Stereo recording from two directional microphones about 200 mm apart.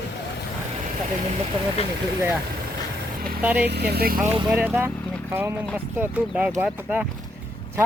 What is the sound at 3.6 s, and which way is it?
Speech, 55° right (ahead or behind).